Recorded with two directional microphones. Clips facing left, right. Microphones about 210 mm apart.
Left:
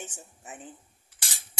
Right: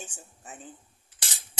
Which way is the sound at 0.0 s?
20° left (ahead or behind).